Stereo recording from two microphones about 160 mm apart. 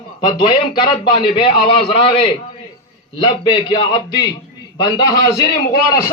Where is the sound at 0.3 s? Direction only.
30° left (ahead or behind).